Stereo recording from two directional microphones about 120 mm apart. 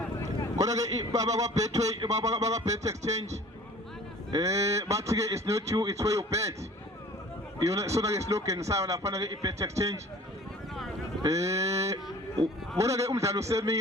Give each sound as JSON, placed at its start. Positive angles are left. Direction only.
{"t": 0.6, "sound": "a man's voice", "side_deg": -30}
{"t": 4.3, "sound": "a man's voice", "side_deg": -25}
{"t": 7.7, "sound": "a man's voice", "side_deg": -25}
{"t": 11.2, "sound": "a man's voice", "side_deg": -25}